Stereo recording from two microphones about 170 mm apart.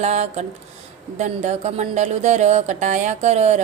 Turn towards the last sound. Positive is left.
turn(degrees=-40)  # may be behind; listen again after turning